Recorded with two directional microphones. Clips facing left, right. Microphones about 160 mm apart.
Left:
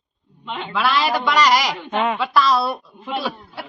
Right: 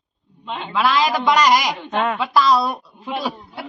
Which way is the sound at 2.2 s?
15° right (ahead or behind).